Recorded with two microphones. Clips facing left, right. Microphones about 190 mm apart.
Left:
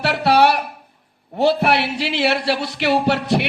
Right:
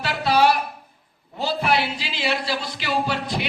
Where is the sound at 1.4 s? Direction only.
65° left (ahead or behind).